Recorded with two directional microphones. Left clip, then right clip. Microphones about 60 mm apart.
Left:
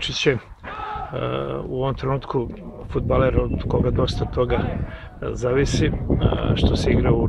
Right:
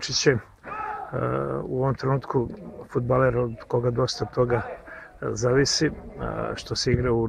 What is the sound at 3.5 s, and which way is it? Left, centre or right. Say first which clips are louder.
Speech: left 2 dB; right.